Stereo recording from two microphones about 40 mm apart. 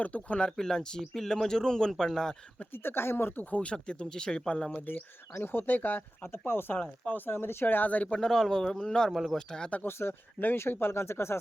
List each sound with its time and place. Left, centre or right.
0.0 s speech: left
0.5 s a man's voice: centre
2.7 s speech: left
3.3 s speech: left
5.4 s speech: left
7.7 s speech: left
8.2 s a man's voice: centre
9.0 s speech: centre
9.5 s speech: left
9.8 s speech: left